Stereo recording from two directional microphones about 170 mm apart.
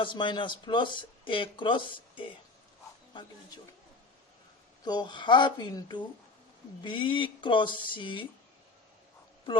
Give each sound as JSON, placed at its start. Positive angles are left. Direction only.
{"t": 0.0, "sound": "speech", "side_deg": 30}
{"t": 4.8, "sound": "speech", "side_deg": 25}